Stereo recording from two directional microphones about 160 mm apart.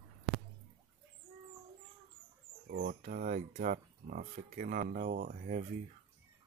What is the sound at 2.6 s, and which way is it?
Speech, 70° right (ahead or behind).